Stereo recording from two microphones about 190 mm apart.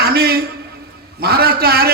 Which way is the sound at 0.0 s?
55° right (ahead or behind).